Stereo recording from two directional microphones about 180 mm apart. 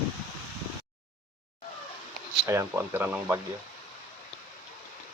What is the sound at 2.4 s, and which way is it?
Speech, 15° right (ahead or behind).